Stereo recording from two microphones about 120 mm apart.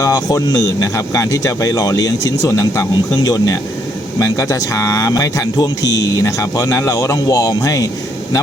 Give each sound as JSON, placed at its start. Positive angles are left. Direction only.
{"t": 0.0, "sound": "speech", "side_deg": 30}